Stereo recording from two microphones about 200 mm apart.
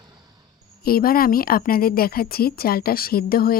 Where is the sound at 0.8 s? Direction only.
45° left (ahead or behind).